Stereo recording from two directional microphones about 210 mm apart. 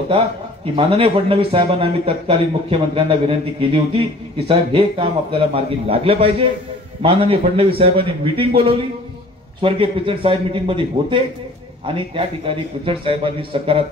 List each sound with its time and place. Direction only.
0.7 s speech: 25° right (ahead or behind)